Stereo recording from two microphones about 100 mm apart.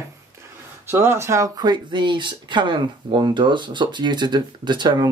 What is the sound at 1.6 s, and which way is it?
Speech, 45° right (ahead or behind).